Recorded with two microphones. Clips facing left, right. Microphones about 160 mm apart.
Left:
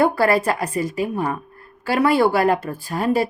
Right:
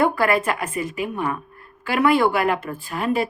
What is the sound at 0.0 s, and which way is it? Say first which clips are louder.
Speech: left 2 dB; 35° left (ahead or behind).